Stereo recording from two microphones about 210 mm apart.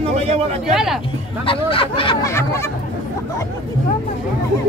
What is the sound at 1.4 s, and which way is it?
Speech, 25° left (ahead or behind).